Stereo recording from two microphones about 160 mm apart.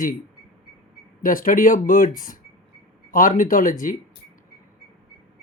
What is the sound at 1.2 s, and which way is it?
Speech, 60° left (ahead or behind).